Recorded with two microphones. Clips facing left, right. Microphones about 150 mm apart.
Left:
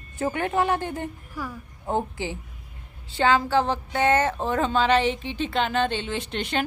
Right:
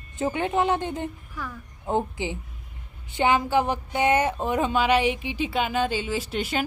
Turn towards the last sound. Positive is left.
turn(degrees=-5)  # may be behind; listen again after turning